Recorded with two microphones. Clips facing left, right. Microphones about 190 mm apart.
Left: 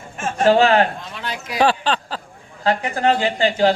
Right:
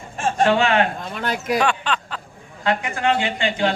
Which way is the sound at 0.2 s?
30° right (ahead or behind).